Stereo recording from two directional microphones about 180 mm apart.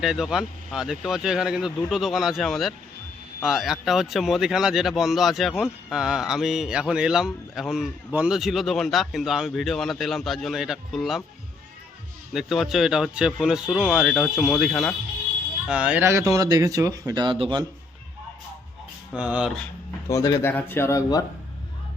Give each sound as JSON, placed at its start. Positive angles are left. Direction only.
{"t": 0.0, "sound": "speech", "side_deg": -5}
{"t": 12.3, "sound": "speech", "side_deg": 0}
{"t": 19.1, "sound": "speech", "side_deg": -5}
{"t": 20.1, "sound": "speech", "side_deg": 20}